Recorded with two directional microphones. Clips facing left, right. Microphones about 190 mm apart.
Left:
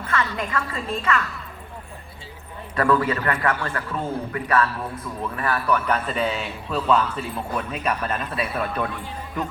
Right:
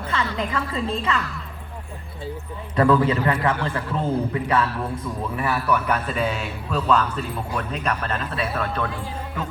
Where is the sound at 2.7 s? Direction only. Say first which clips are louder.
Right 3 dB; 20° right (ahead or behind).